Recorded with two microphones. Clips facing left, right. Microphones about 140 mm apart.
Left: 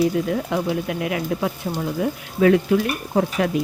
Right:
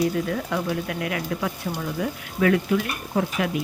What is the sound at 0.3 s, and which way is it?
Speech, 20° left (ahead or behind).